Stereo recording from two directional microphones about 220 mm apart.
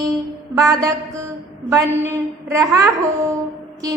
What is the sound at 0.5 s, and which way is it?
A woman's voice, 15° right (ahead or behind).